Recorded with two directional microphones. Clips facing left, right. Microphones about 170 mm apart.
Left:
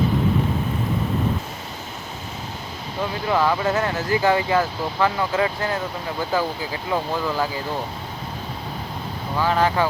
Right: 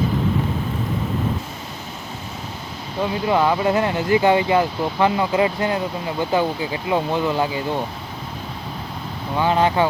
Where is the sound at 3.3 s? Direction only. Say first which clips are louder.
Right 2 dB; 15° right (ahead or behind).